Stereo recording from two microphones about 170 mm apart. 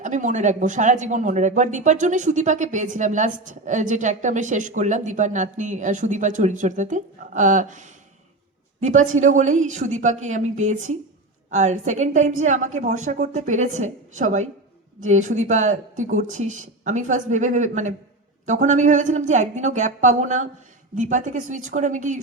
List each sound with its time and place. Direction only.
0.0 s a woman's voice: 45° right (ahead or behind)